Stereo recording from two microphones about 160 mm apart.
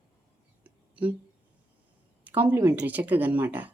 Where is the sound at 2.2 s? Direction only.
10° right (ahead or behind).